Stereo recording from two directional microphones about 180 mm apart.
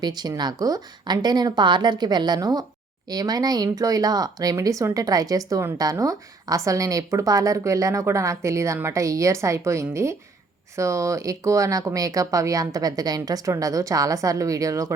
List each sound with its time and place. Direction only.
0.0 s a woman's voice: 20° right (ahead or behind)